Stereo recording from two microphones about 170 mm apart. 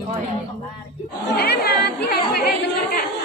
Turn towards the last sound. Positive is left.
turn(degrees=65)  # may be behind; listen again after turning